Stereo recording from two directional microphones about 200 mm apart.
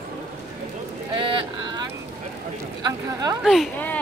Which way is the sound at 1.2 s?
20° right (ahead or behind).